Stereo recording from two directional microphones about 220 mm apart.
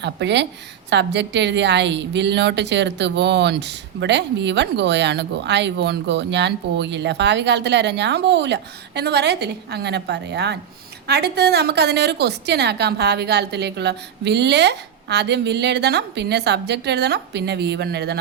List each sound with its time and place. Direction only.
0.0 s a woman's voice: 50° right (ahead or behind)